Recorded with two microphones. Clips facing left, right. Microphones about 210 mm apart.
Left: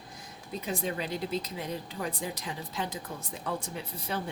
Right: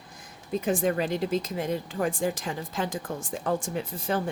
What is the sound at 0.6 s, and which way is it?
Speech, 50° right (ahead or behind).